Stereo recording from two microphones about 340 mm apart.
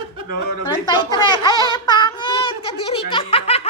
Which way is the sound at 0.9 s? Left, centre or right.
Centre.